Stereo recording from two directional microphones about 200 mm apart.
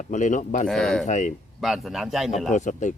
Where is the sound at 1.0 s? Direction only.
35° left (ahead or behind).